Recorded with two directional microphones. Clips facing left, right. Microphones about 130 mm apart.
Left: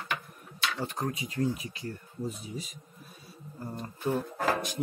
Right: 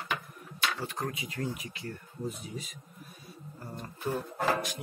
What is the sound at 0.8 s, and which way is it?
Speech, 30° left (ahead or behind).